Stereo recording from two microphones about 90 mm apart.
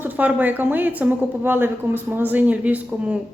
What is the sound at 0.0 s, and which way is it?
A woman's voice, 20° right (ahead or behind).